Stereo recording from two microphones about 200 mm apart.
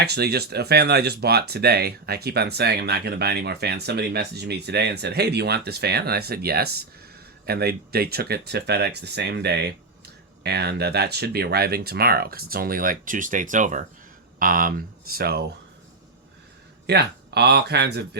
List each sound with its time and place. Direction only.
0.0 s speech: 55° right (ahead or behind)
16.8 s speech: 55° right (ahead or behind)